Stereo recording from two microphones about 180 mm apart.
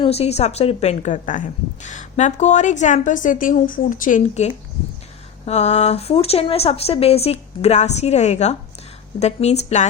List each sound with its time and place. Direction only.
0.0 s a woman's voice: 35° left (ahead or behind)